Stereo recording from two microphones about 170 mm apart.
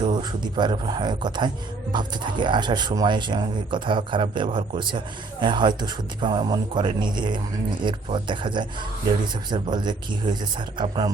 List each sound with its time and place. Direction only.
0.0 s speech: 25° right (ahead or behind)